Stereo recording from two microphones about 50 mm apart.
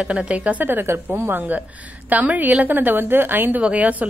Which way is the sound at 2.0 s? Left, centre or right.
Right.